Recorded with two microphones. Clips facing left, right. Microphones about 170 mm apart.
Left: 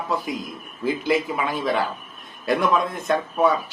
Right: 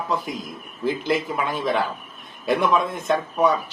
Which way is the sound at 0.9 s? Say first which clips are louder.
Left 1 dB; centre (ahead or behind).